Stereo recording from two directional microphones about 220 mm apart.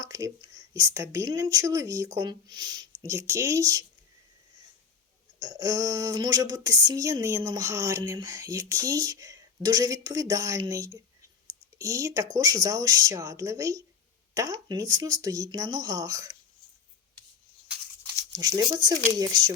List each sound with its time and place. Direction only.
0.0 s a sound: 15° right (ahead or behind)
0.7 s speech: 15° right (ahead or behind)
5.4 s speech: 15° right (ahead or behind)
18.3 s speech: 15° right (ahead or behind)